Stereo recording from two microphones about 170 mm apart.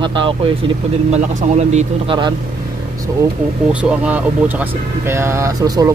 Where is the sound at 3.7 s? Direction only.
10° right (ahead or behind).